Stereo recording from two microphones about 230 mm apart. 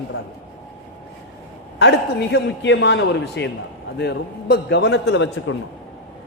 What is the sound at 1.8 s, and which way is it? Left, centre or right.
A man's voice, left.